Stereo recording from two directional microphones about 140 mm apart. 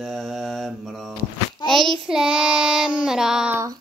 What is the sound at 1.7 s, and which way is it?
Child singing, centre (ahead or behind).